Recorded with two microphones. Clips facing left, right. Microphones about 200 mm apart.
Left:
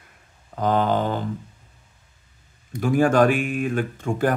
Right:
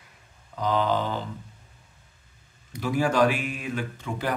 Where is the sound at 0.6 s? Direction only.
50° left (ahead or behind).